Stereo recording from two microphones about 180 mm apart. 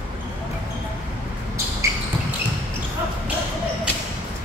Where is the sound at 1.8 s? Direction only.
15° right (ahead or behind).